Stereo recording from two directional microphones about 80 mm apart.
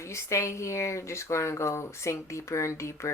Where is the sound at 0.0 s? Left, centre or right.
Left.